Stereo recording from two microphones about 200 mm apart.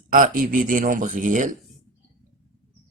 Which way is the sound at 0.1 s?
40° right (ahead or behind).